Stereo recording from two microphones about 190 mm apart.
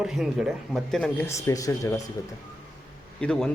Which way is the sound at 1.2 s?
15° left (ahead or behind).